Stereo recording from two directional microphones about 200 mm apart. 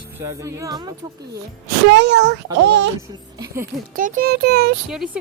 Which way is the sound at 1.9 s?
60° right (ahead or behind).